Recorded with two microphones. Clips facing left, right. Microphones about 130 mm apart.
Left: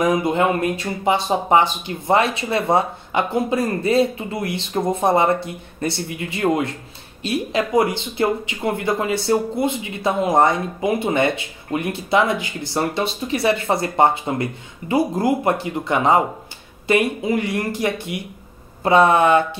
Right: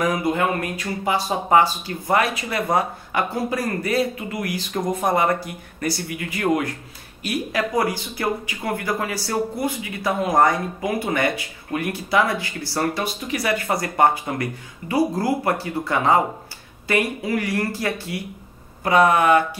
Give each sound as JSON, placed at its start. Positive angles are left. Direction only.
{"t": 0.0, "sound": "speech", "side_deg": 20}